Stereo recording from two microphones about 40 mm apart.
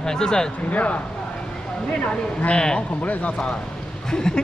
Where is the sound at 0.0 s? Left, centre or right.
Centre.